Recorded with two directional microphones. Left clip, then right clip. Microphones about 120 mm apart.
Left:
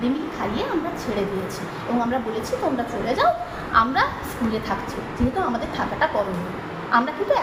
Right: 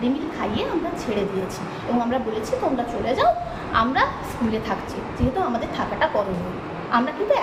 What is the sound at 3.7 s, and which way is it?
Speech, 10° right (ahead or behind).